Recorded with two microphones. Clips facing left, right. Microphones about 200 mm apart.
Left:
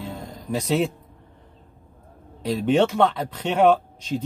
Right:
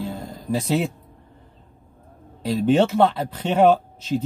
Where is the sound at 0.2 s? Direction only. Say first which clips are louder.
Right 2 dB; 5° right (ahead or behind).